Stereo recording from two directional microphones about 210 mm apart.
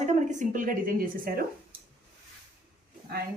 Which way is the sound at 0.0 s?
35° right (ahead or behind).